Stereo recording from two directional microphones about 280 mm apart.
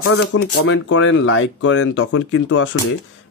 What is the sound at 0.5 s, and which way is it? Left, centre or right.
Speech, left.